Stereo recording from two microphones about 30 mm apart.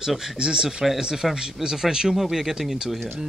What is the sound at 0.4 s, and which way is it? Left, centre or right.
Speech, right.